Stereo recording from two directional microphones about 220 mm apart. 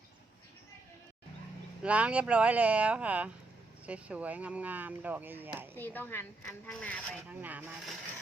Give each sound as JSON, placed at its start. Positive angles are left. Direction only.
{"t": 1.8, "sound": "speech", "side_deg": -5}
{"t": 5.7, "sound": "speech", "side_deg": 10}
{"t": 7.3, "sound": "speech", "side_deg": -5}